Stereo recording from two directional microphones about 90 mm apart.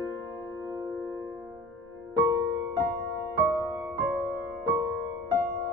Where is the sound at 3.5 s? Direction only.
45° right (ahead or behind).